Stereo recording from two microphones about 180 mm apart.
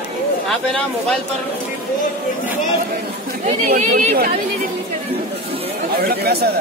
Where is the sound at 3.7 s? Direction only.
55° right (ahead or behind).